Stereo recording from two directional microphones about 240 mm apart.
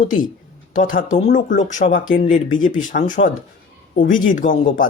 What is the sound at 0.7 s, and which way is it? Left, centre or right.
Speech, left.